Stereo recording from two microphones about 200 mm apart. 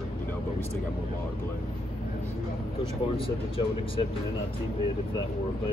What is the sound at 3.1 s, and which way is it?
Speech, 25° left (ahead or behind).